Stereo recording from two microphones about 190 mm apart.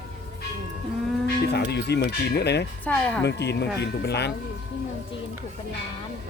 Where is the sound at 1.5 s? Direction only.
60° left (ahead or behind).